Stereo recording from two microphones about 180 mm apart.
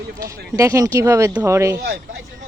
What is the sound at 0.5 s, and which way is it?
Speech, 15° right (ahead or behind).